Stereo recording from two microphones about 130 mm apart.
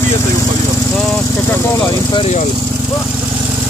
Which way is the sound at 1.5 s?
20° left (ahead or behind).